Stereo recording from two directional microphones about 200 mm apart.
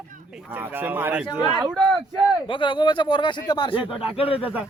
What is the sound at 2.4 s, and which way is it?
Speech, 25° left (ahead or behind).